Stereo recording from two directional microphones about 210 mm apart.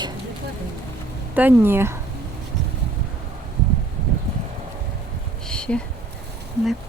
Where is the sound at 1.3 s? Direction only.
10° right (ahead or behind).